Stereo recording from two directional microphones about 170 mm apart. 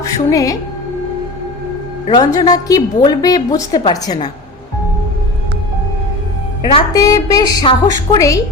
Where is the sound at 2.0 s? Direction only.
25° left (ahead or behind).